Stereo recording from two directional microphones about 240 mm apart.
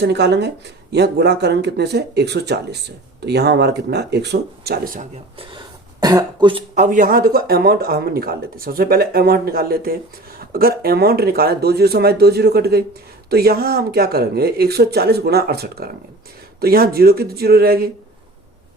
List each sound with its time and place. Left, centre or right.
0.0 s speech: right
5.4 s speech: centre
6.7 s speech: right